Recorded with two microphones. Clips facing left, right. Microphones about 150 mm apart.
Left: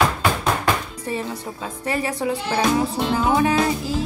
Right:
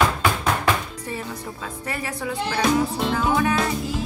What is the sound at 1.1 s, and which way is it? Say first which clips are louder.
A woman's voice: left 5 dB; 25° left (ahead or behind).